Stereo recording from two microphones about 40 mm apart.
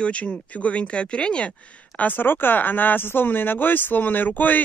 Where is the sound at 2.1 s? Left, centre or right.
Left.